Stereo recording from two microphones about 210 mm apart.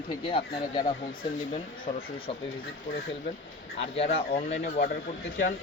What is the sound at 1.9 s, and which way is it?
Speech, 30° left (ahead or behind).